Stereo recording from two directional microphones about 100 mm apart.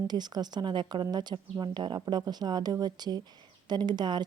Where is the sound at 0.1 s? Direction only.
45° right (ahead or behind).